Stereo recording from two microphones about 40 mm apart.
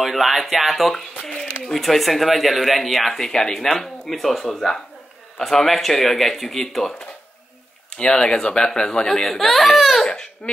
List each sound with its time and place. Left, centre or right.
0.0 s speech: centre
8.0 s speech: left; by 10.1 s centre
10.4 s speech: left